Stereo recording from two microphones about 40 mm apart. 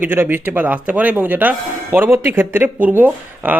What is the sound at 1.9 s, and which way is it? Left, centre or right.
Speech, right.